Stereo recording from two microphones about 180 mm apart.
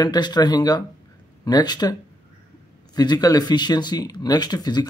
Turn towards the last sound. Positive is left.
turn(degrees=25)  # may be behind; listen again after turning